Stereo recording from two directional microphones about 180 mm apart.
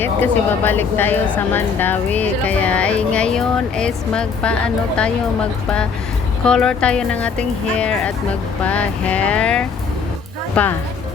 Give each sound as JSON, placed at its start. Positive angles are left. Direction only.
{"t": 0.0, "sound": "speech", "side_deg": 10}